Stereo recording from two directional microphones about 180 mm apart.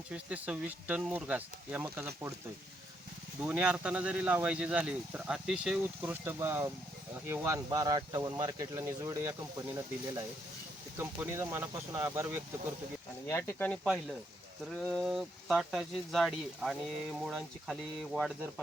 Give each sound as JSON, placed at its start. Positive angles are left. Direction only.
{"t": 0.1, "sound": "speech", "side_deg": -5}
{"t": 3.4, "sound": "speech", "side_deg": -5}
{"t": 10.9, "sound": "speech", "side_deg": -10}
{"t": 13.2, "sound": "speech", "side_deg": 15}